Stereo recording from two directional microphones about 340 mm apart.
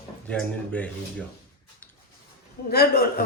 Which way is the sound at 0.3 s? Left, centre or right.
Centre.